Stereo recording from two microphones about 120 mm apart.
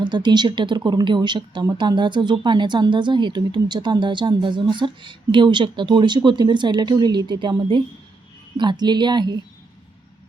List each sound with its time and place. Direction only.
0.0 s speech: 40° right (ahead or behind)